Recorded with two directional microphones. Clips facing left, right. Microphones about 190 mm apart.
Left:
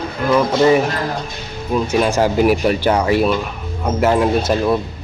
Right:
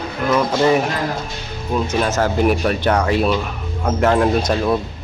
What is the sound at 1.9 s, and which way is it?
Speech, 15° left (ahead or behind).